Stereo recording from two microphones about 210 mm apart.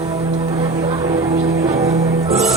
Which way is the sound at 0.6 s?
25° right (ahead or behind).